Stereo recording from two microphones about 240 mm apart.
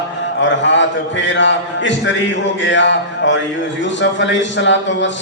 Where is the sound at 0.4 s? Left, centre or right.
Left.